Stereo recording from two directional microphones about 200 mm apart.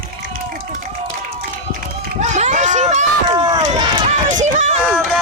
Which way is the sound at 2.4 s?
35° right (ahead or behind).